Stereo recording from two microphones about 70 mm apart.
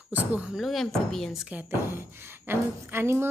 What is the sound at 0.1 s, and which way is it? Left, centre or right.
Speech, right.